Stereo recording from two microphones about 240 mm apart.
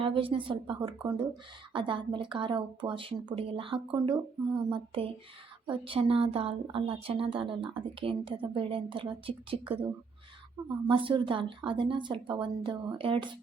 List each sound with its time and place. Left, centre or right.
0.0 s a woman's voice: right
10.8 s a woman's voice: right